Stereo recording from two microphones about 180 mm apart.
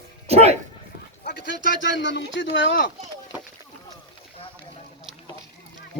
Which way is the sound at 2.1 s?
75° left (ahead or behind).